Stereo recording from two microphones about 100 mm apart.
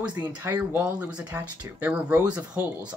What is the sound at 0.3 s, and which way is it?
Speech, 15° right (ahead or behind).